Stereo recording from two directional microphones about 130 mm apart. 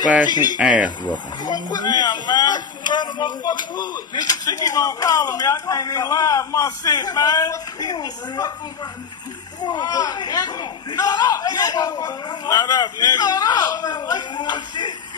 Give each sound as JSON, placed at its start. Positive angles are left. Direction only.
{"t": 0.6, "sound": "speech", "side_deg": -10}
{"t": 0.8, "sound": "speech", "side_deg": 35}
{"t": 9.6, "sound": "speech", "side_deg": 35}